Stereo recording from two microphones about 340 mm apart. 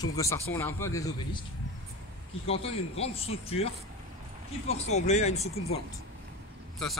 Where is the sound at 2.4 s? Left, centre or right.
Centre.